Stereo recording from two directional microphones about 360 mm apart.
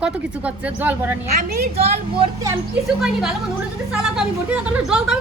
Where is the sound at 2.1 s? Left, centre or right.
Centre.